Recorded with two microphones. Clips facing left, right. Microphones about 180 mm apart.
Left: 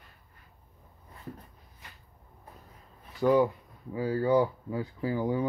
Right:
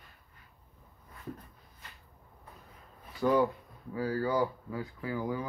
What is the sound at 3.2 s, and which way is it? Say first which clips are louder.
Speech: left 3 dB; 15° left (ahead or behind).